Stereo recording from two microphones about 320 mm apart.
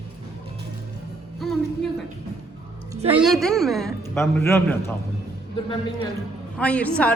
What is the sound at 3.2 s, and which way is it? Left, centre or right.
A man's voice, centre.